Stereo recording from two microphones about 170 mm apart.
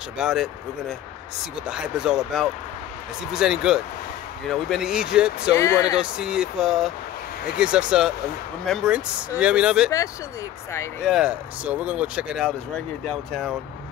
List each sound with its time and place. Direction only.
0.2 s speech: centre (ahead or behind)
5.6 s speech: 20° left (ahead or behind)
5.9 s speech: 5° right (ahead or behind)
11.1 s speech: 5° right (ahead or behind)